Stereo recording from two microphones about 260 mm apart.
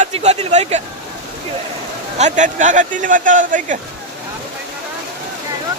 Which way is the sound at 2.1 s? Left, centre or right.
Right.